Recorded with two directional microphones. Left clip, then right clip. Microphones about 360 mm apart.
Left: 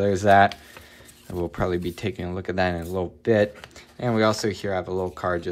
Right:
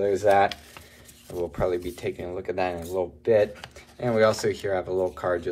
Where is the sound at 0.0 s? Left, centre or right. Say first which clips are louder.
Left 3 dB; left.